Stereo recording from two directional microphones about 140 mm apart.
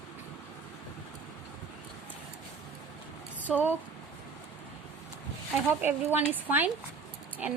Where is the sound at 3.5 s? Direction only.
5° right (ahead or behind).